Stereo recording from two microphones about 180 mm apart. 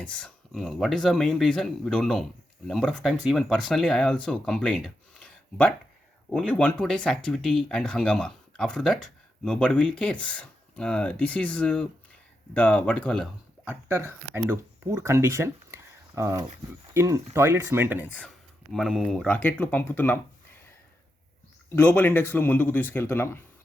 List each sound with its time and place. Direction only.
0.0 s speech: 5° left (ahead or behind)
13.7 s speech: 15° right (ahead or behind)
18.1 s speech: 5° left (ahead or behind)
21.8 s speech: 10° left (ahead or behind)